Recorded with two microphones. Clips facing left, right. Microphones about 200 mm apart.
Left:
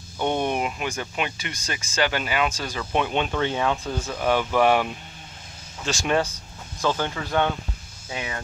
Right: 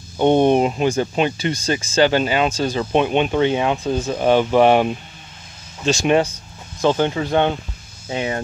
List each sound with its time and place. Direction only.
0.2 s speech: 30° right (ahead or behind)